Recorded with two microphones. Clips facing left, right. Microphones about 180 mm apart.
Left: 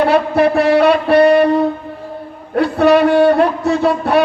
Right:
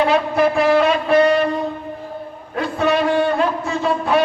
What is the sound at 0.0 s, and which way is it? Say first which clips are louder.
A man's voice: left 4 dB; 65° left (ahead or behind).